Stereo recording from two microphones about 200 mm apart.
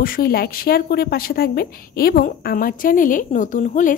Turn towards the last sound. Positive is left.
turn(degrees=40)  # may be behind; listen again after turning